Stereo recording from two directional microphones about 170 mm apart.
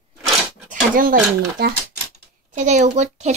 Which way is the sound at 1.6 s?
70° right (ahead or behind).